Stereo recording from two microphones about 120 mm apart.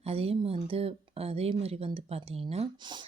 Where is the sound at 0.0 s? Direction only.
55° right (ahead or behind).